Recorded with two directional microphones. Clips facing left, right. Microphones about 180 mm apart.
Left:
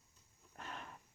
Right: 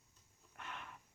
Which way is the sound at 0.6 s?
35° left (ahead or behind).